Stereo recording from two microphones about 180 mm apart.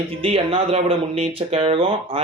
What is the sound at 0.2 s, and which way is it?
Speech, 30° right (ahead or behind).